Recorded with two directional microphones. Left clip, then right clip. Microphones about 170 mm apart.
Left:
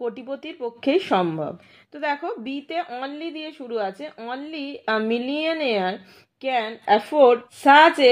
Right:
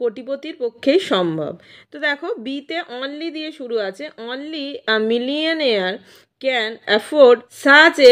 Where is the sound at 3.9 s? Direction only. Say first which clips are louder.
Right 3 dB; 55° right (ahead or behind).